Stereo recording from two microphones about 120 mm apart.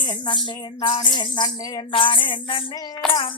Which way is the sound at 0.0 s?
40° left (ahead or behind).